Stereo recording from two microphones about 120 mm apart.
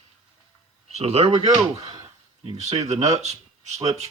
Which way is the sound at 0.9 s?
60° right (ahead or behind).